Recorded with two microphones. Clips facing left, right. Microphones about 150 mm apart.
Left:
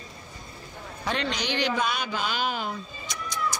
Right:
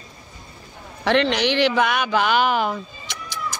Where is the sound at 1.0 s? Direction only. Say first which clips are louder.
Right 10 dB; 75° right (ahead or behind).